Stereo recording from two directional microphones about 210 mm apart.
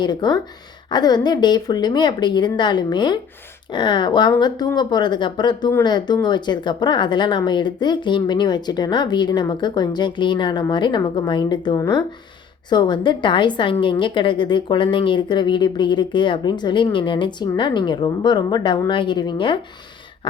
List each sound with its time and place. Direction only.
0.0 s speech: 20° left (ahead or behind)